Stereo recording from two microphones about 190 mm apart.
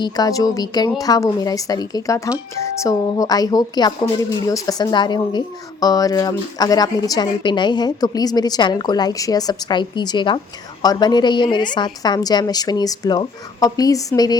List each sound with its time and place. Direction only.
0.0 s a woman's voice: 20° left (ahead or behind)